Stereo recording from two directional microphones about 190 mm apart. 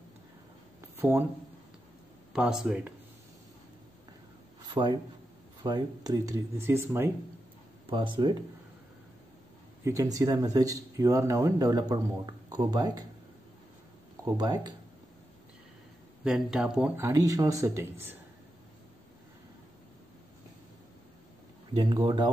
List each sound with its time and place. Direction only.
0.7 s a sound: 10° right (ahead or behind)
2.3 s speech: 5° right (ahead or behind)
4.6 s a man's voice: 20° right (ahead or behind)
7.9 s speech: 25° right (ahead or behind)
9.8 s speech: 15° right (ahead or behind)
14.2 s speech: 20° right (ahead or behind)
16.3 s speech: 5° right (ahead or behind)
21.7 s speech: 20° right (ahead or behind)